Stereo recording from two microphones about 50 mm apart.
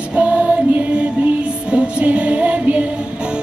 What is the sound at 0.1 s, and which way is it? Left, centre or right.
Music, right.